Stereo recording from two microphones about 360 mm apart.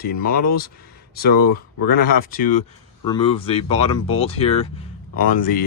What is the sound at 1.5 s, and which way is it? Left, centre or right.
Speech, left.